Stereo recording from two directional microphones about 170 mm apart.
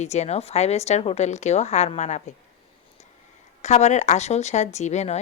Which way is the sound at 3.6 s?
40° left (ahead or behind).